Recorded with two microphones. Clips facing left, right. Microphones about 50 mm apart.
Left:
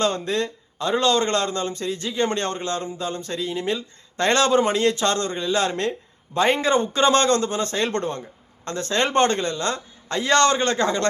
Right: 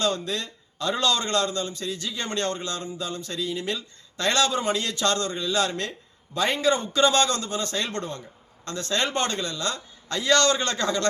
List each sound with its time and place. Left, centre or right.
0.0 s a man's voice: left